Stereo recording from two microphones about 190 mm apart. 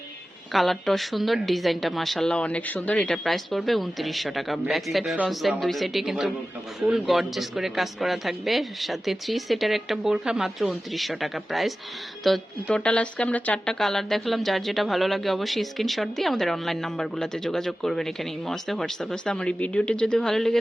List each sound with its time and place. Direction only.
0.5 s a woman's voice: centre (ahead or behind)